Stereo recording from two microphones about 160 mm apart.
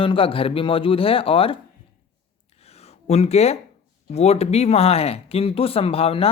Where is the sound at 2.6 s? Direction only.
40° left (ahead or behind).